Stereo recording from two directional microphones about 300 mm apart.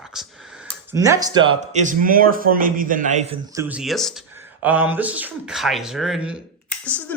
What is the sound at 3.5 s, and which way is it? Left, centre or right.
A man's voice, centre.